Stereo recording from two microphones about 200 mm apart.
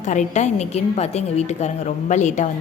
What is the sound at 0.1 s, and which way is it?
A woman's voice, 35° left (ahead or behind).